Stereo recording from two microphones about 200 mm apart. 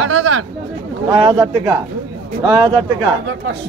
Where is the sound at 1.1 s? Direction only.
25° right (ahead or behind).